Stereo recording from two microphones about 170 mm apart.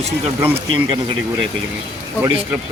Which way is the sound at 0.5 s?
30° right (ahead or behind).